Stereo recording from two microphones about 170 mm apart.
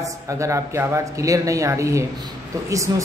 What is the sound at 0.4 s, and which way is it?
Speech, 15° right (ahead or behind).